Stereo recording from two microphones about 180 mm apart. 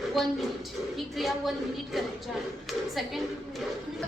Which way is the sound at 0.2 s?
Centre (ahead or behind).